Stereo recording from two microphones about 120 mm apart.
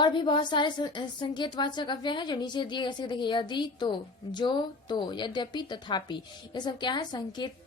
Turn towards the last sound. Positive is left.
turn(degrees=40)  # may be behind; listen again after turning